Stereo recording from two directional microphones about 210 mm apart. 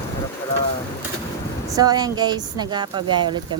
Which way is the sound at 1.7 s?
20° right (ahead or behind).